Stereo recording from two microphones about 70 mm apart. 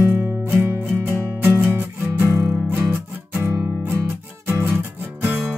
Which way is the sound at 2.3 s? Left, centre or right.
Right.